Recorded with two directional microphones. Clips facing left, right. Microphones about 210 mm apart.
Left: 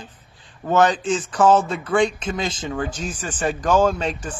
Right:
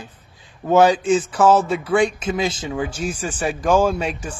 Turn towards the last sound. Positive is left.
turn(degrees=-10)  # may be behind; listen again after turning